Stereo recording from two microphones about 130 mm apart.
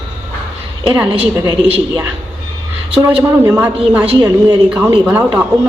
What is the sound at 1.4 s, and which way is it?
Speech, 35° right (ahead or behind).